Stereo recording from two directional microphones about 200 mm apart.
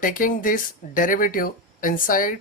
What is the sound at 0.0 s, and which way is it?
Speech, 40° left (ahead or behind).